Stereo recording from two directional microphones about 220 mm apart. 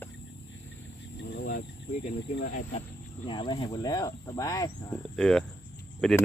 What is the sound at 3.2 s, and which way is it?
Speech, 20° left (ahead or behind).